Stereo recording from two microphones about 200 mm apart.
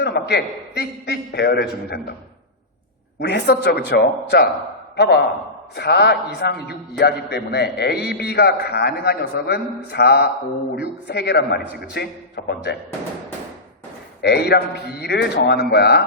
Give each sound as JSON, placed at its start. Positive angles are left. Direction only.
{"t": 0.0, "sound": "a man's voice", "side_deg": 55}
{"t": 3.2, "sound": "a man's voice", "side_deg": 55}
{"t": 14.2, "sound": "a man's voice", "side_deg": 55}